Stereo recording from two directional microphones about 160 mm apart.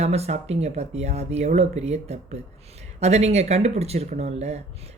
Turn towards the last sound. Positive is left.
turn(degrees=-40)  # may be behind; listen again after turning